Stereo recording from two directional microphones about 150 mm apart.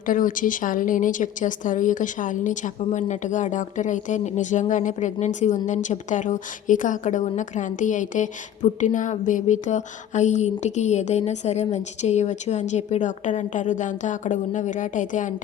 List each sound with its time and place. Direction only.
0.0 s a woman's voice: 65° left (ahead or behind)